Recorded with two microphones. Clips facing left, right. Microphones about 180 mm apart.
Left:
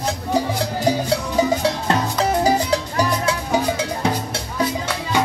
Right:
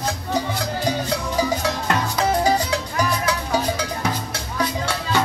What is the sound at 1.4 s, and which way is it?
Music, 30° left (ahead or behind).